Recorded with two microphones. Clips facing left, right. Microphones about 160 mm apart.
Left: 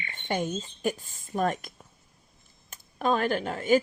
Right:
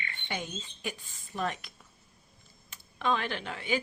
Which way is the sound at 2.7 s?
45° left (ahead or behind).